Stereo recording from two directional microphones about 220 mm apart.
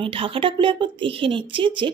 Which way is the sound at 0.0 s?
25° right (ahead or behind).